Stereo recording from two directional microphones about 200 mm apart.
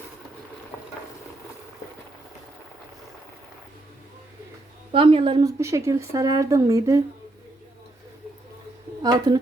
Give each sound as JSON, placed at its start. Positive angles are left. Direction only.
{"t": 4.9, "sound": "a woman's voice", "side_deg": -25}
{"t": 9.0, "sound": "speech", "side_deg": -20}